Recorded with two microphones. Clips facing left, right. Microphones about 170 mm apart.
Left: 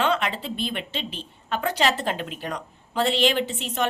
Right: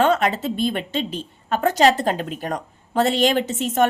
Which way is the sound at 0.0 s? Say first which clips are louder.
Right 6 dB; 45° right (ahead or behind).